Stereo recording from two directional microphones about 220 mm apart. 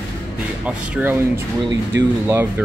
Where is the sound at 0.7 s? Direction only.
10° right (ahead or behind).